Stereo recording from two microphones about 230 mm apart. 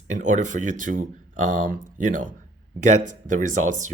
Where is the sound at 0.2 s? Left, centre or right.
Right.